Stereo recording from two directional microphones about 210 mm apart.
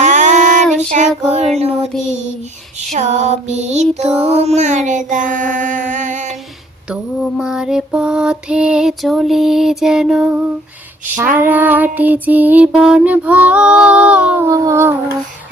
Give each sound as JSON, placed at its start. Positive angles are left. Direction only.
{"t": 0.0, "sound": "child singing", "side_deg": -35}
{"t": 2.9, "sound": "child singing", "side_deg": -35}
{"t": 6.9, "sound": "mantra", "side_deg": -5}
{"t": 11.1, "sound": "child singing", "side_deg": -10}